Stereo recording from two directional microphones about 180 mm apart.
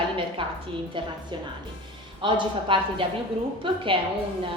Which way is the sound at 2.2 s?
30° right (ahead or behind).